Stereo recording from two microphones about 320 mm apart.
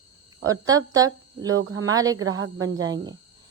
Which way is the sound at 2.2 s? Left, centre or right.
Right.